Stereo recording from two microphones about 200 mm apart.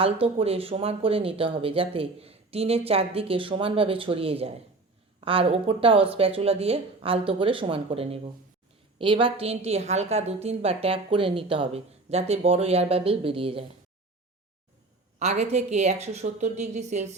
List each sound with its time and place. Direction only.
0.0 s a woman's voice: 30° right (ahead or behind)
15.2 s a woman's voice: 35° right (ahead or behind)